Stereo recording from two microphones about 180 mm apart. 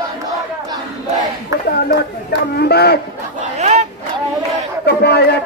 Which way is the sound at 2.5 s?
60° left (ahead or behind).